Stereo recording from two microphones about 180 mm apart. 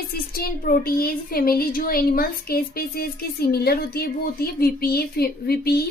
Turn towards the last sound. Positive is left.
turn(degrees=60)  # may be behind; listen again after turning